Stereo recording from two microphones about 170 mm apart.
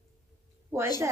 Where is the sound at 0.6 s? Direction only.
15° right (ahead or behind).